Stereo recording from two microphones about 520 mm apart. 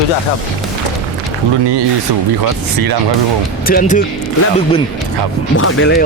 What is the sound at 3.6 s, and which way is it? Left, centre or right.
Speech, centre.